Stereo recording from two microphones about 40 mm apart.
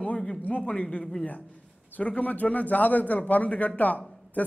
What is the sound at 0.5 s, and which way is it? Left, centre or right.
Speech, left.